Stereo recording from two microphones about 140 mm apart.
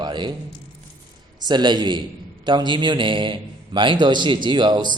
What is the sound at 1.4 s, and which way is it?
A man's voice, 30° right (ahead or behind).